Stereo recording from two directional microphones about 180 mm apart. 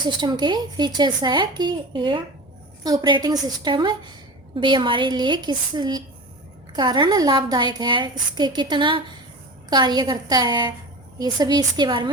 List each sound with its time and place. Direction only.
0.0 s a woman's voice: 25° right (ahead or behind)